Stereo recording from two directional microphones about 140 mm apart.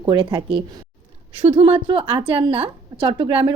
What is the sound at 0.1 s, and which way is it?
A woman's voice, 35° right (ahead or behind).